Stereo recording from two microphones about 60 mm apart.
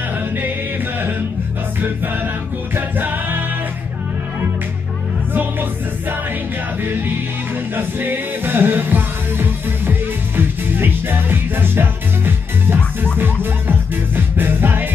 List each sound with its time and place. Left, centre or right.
2.7 s music: right
5.3 s music: right
6.8 s music: right